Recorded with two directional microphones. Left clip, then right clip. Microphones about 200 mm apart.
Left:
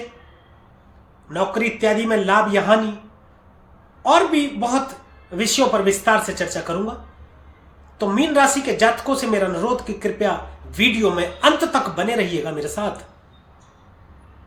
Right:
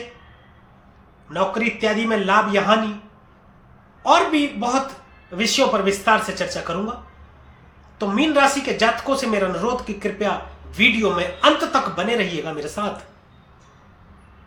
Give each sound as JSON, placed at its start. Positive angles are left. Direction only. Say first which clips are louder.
{"t": 1.3, "sound": "speech", "louder": "even", "side_deg": 15}
{"t": 4.0, "sound": "speech", "louder": "left 1 dB", "side_deg": 15}
{"t": 7.9, "sound": "speech", "louder": "left 1 dB", "side_deg": 15}